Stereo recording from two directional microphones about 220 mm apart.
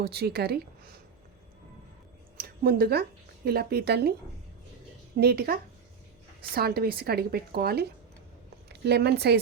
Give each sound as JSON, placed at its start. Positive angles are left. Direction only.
{"t": 0.0, "sound": "a woman's voice", "side_deg": -45}
{"t": 2.4, "sound": "speech", "side_deg": -45}
{"t": 5.2, "sound": "a woman's voice", "side_deg": -45}